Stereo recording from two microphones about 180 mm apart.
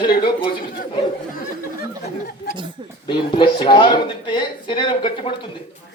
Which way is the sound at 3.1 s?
25° left (ahead or behind).